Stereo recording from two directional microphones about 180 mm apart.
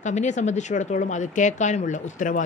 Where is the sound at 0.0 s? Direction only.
40° left (ahead or behind).